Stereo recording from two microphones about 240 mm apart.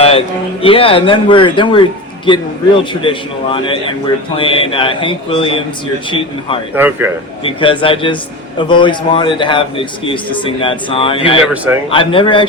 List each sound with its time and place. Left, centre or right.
0.6 s a man's voice: left
6.7 s speech: centre
7.4 s a man's voice: left
11.4 s speech: centre
11.9 s a man's voice: left